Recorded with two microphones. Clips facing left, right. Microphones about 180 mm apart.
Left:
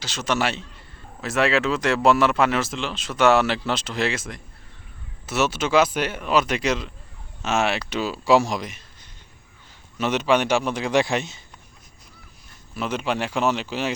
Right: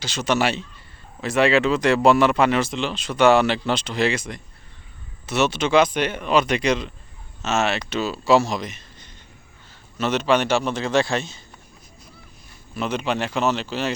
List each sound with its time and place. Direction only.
0.0 s speech: centre (ahead or behind); by 11.3 s 20° left (ahead or behind)
12.7 s speech: 5° left (ahead or behind)